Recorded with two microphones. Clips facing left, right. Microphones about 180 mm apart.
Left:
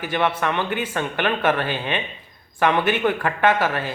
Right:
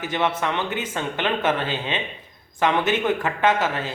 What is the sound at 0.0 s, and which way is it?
Speech, 20° right (ahead or behind).